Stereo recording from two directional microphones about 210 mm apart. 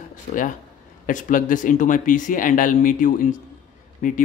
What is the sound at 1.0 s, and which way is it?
Speech, 40° left (ahead or behind).